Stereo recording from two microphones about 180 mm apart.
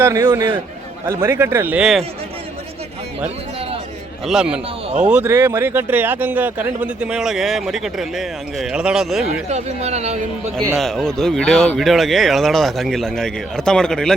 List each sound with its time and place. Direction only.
0.0 s a man's voice: 15° right (ahead or behind)
4.3 s speech: 5° right (ahead or behind)
9.2 s speech: 35° right (ahead or behind)
10.8 s speech: centre (ahead or behind)